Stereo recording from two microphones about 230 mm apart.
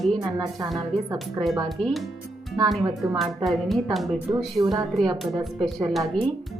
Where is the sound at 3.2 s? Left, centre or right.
Centre.